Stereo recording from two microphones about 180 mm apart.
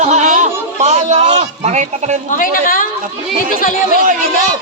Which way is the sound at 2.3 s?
50° left (ahead or behind).